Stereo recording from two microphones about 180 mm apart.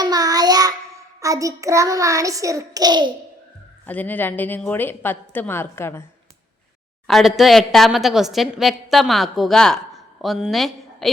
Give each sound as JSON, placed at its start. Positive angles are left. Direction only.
{"t": 0.0, "sound": "child singing", "side_deg": -20}
{"t": 3.8, "sound": "a woman's voice", "side_deg": 10}
{"t": 7.1, "sound": "a woman's voice", "side_deg": 0}